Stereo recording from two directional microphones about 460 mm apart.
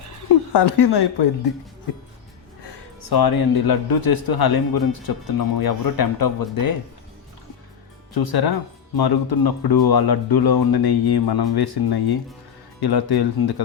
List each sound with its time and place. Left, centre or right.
0.5 s speech: left
2.6 s speech: left
8.1 s speech: left